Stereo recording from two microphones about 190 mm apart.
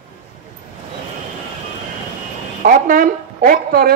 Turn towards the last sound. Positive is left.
turn(degrees=-50)  # may be behind; listen again after turning